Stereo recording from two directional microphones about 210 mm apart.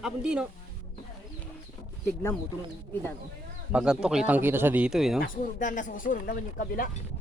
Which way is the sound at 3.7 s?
5° right (ahead or behind).